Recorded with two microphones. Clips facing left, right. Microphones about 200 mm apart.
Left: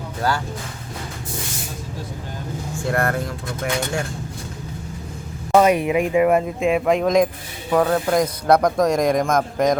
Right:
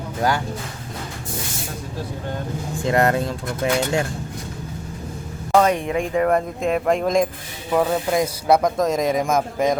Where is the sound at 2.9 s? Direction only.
20° right (ahead or behind).